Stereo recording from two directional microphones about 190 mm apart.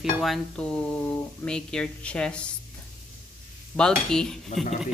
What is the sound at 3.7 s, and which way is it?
Speech, 5° left (ahead or behind).